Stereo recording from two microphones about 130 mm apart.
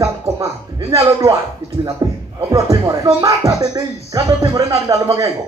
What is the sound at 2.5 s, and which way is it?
Speech, 25° right (ahead or behind).